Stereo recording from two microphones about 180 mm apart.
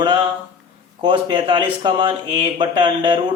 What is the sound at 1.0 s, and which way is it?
A man's voice, 30° right (ahead or behind).